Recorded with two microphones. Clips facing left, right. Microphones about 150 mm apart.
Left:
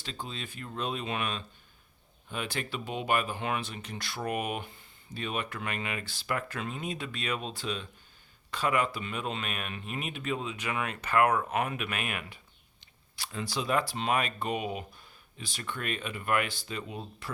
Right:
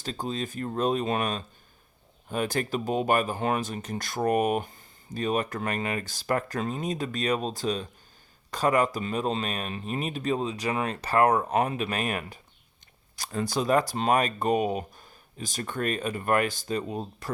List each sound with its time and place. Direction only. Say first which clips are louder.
0.0 s speech: right 8 dB; 40° right (ahead or behind)